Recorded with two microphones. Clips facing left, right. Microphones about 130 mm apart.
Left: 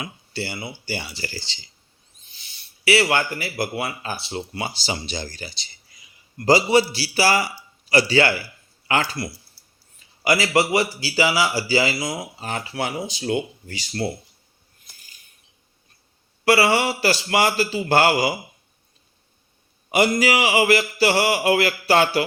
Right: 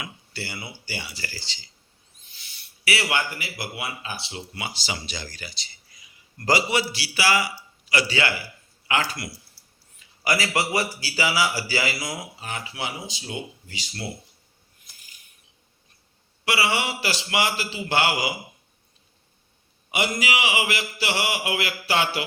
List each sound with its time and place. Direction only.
0.0 s speech: 25° left (ahead or behind)
2.5 s mantra: 25° left (ahead or behind)
10.0 s a man's voice: 30° left (ahead or behind)
12.5 s speech: 40° left (ahead or behind); by 13.7 s 60° left (ahead or behind)
16.5 s mantra: 40° left (ahead or behind)
19.9 s mantra: 40° left (ahead or behind)